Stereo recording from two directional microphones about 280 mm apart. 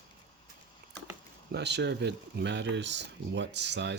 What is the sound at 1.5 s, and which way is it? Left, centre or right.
A man's voice, right.